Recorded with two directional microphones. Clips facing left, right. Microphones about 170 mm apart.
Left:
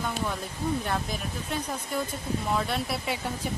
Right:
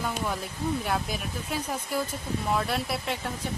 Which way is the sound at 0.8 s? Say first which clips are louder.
Right 1 dB; 5° right (ahead or behind).